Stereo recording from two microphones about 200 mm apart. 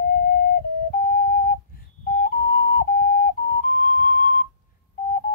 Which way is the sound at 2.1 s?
45° left (ahead or behind).